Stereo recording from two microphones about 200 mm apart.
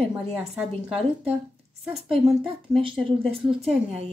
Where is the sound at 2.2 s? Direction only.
Centre (ahead or behind).